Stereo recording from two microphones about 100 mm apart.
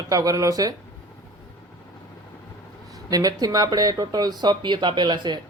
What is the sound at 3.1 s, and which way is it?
Speech, 40° right (ahead or behind).